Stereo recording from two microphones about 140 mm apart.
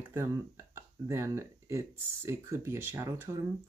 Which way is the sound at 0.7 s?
20° right (ahead or behind).